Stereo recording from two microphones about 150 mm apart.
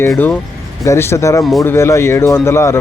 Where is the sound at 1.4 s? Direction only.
Centre (ahead or behind).